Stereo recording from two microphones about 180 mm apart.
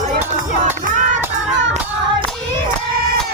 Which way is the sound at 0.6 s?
45° right (ahead or behind).